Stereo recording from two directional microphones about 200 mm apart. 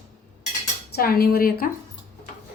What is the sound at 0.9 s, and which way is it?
Speech, 50° left (ahead or behind).